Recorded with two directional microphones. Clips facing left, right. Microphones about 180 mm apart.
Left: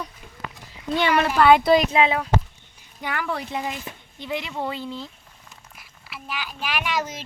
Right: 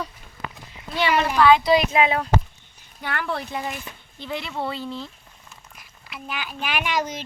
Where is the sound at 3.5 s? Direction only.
20° left (ahead or behind).